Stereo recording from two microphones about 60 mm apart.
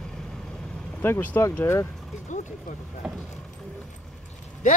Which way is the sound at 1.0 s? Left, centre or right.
Left.